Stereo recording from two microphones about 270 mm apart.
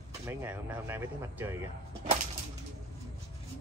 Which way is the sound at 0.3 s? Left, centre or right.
Centre.